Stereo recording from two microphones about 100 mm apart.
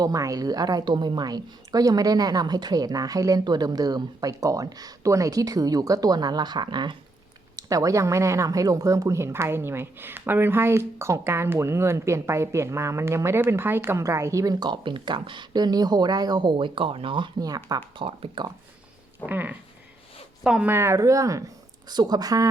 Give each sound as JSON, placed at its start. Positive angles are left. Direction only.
{"t": 0.0, "sound": "a woman's voice", "side_deg": -35}
{"t": 7.5, "sound": "speech", "side_deg": -35}
{"t": 17.4, "sound": "a woman's voice", "side_deg": -40}
{"t": 18.0, "sound": "speech", "side_deg": -65}
{"t": 19.2, "sound": "a sound", "side_deg": -15}
{"t": 20.7, "sound": "a woman's voice", "side_deg": -25}